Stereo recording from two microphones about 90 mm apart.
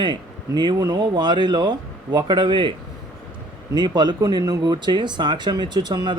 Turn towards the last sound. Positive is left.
turn(degrees=-50)  # may be behind; listen again after turning